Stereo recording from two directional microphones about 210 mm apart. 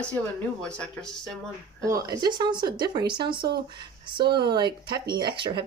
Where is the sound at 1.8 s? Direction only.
15° right (ahead or behind).